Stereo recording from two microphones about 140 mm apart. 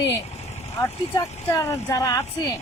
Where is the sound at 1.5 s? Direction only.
20° left (ahead or behind).